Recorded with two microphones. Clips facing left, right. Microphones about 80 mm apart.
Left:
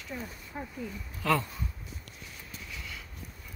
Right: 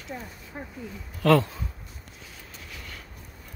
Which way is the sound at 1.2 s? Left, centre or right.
Right.